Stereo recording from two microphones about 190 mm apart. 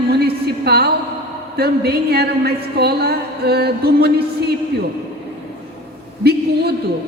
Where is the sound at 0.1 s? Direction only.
55° right (ahead or behind).